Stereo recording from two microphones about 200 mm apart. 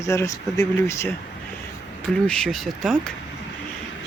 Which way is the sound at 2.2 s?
5° left (ahead or behind).